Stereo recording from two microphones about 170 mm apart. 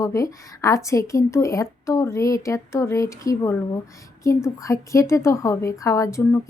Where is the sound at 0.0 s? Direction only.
20° left (ahead or behind).